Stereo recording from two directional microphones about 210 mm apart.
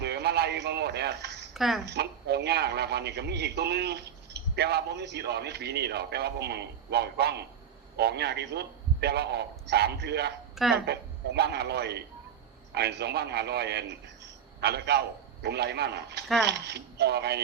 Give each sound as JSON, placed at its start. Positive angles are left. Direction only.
{"t": 0.0, "sound": "a sound", "side_deg": -50}
{"t": 1.5, "sound": "a woman's voice", "side_deg": 0}
{"t": 1.8, "sound": "a man's voice", "side_deg": -50}
{"t": 10.5, "sound": "speech", "side_deg": 0}
{"t": 11.3, "sound": "a man's voice", "side_deg": -50}